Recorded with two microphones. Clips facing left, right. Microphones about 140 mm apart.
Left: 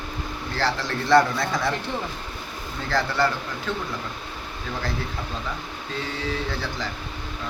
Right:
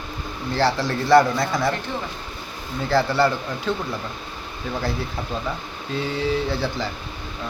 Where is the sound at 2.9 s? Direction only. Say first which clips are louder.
Right 4 dB; 10° right (ahead or behind).